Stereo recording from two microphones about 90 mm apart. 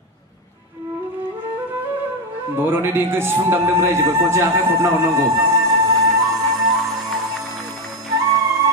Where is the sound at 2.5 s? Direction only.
25° right (ahead or behind).